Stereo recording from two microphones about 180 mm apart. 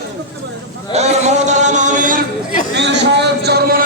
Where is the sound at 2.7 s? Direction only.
70° right (ahead or behind).